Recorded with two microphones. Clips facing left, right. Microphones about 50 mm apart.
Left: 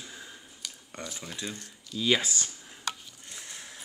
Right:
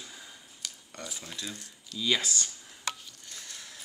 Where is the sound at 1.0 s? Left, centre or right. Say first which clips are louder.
Left 2 dB; centre.